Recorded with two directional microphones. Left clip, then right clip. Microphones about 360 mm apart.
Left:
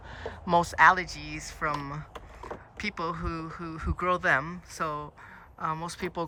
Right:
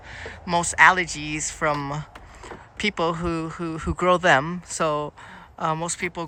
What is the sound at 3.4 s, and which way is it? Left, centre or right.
Speech, centre.